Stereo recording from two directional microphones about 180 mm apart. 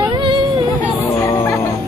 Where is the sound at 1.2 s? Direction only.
15° left (ahead or behind).